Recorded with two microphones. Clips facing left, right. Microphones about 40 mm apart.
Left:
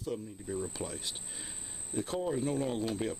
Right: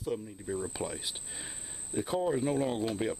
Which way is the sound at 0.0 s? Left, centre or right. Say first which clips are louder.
Right 2 dB; centre.